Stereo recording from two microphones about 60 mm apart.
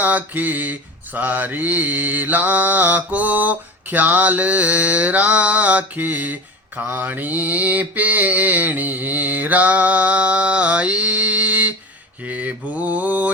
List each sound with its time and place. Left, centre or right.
0.0 s mantra: right